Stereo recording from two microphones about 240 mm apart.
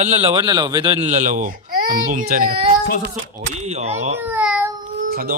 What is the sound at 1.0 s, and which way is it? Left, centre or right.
Speech, right.